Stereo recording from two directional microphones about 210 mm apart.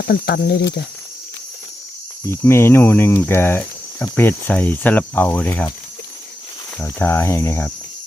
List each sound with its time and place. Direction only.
0.0 s speech: 45° left (ahead or behind)
2.2 s speech: 10° left (ahead or behind)
6.7 s speech: 10° left (ahead or behind)